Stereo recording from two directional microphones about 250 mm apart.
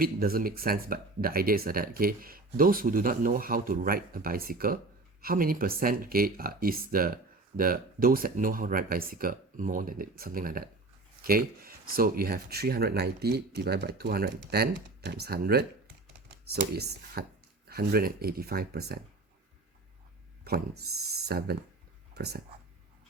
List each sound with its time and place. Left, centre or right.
0.0 s speech: right
20.4 s speech: right